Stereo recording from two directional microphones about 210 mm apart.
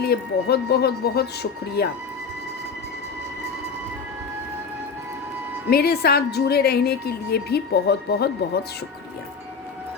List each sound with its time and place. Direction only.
0.0 s a woman's voice: 50° left (ahead or behind)
5.7 s a woman's voice: 50° left (ahead or behind)